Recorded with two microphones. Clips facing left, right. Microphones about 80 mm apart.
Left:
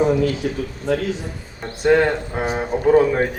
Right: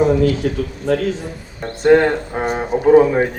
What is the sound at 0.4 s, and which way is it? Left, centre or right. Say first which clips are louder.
Speech: right 3 dB; right.